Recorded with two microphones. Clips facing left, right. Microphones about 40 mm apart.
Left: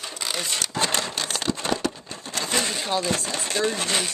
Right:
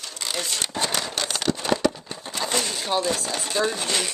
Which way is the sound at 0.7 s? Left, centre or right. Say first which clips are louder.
Left 2 dB; left.